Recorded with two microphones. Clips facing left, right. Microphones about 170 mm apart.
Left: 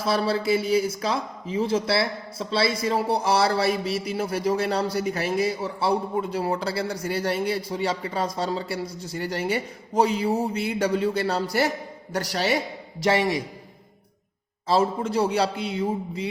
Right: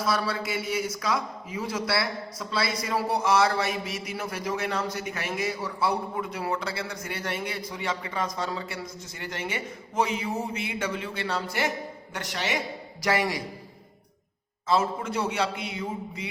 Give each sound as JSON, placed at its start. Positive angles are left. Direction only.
{"t": 0.0, "sound": "speech", "side_deg": 30}
{"t": 13.0, "sound": "a man's voice", "side_deg": 25}
{"t": 14.7, "sound": "speech", "side_deg": 30}